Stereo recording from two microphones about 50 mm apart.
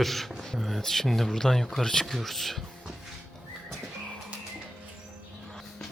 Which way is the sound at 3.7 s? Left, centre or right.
Centre.